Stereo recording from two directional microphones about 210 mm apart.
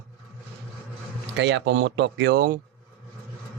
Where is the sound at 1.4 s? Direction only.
60° right (ahead or behind).